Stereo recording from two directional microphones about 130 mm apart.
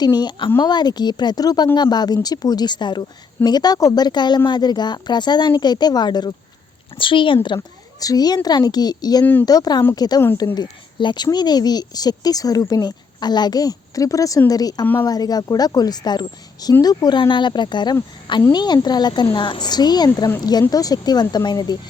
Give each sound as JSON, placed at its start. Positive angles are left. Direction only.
{"t": 0.0, "sound": "speech", "side_deg": 30}
{"t": 9.2, "sound": "speech", "side_deg": 15}
{"t": 9.5, "sound": "speech", "side_deg": 30}